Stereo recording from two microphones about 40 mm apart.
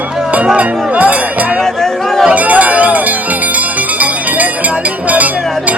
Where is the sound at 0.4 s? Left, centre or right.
Right.